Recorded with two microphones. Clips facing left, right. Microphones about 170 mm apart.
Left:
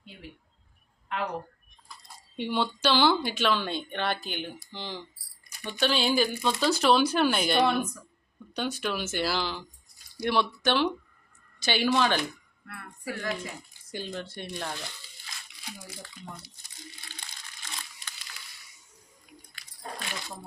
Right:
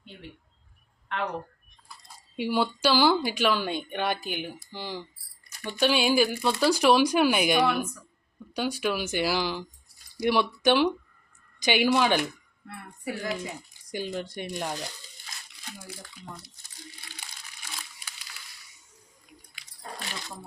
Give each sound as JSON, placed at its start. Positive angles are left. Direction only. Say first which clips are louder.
{"t": 2.3, "sound": "speech", "louder": "right 3 dB", "side_deg": -10}
{"t": 12.6, "sound": "speech", "louder": "right 2 dB", "side_deg": -20}
{"t": 16.2, "sound": "speech", "louder": "left 2 dB", "side_deg": -5}
{"t": 17.1, "sound": "crumpling", "louder": "even", "side_deg": -10}